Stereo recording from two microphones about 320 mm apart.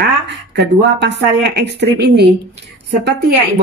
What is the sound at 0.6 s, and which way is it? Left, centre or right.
A woman's voice, right.